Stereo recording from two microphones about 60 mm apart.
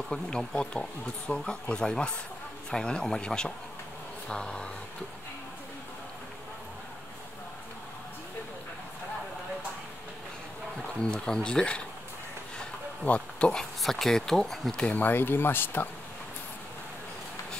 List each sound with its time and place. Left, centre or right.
0.1 s speech: centre
11.0 s speech: centre
13.0 s speech: left
13.8 s speech: centre
15.0 s speech: left